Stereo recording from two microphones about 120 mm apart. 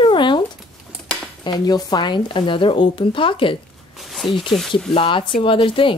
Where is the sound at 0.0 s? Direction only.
45° left (ahead or behind).